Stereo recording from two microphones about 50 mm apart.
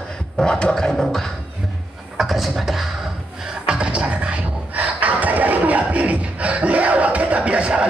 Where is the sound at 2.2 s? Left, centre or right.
Centre.